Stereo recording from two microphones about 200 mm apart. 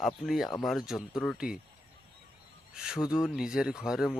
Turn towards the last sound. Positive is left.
turn(degrees=0)  # may be behind; listen again after turning